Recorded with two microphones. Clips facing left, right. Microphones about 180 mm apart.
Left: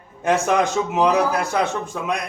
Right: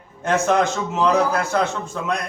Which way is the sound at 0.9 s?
15° left (ahead or behind).